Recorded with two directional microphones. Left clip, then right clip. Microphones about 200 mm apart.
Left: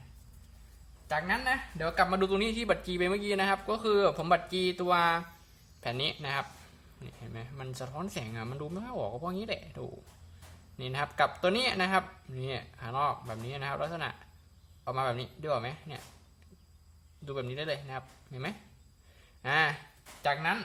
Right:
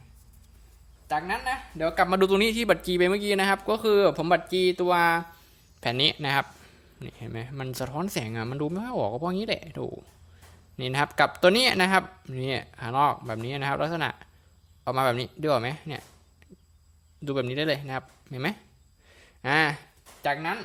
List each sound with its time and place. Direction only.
1.1 s a woman's voice: 30° right (ahead or behind)
17.2 s speech: 45° right (ahead or behind)
20.2 s speech: 30° right (ahead or behind)